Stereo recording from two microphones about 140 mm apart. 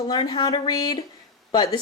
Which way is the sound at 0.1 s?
30° left (ahead or behind).